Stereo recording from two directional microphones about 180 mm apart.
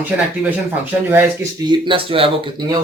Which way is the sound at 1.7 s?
30° right (ahead or behind).